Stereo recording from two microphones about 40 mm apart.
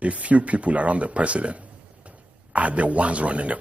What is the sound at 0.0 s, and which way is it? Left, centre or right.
A man's voice, right.